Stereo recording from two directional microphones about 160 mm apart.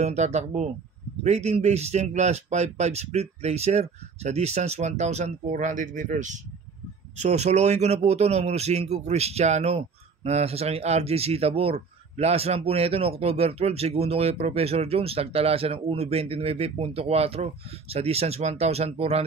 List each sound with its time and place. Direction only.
0.0 s a man's voice: 45° right (ahead or behind)